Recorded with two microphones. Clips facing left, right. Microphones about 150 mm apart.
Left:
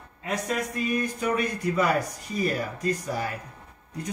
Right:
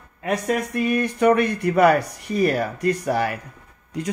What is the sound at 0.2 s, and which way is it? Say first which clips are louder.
Speech: right 6 dB; 65° right (ahead or behind).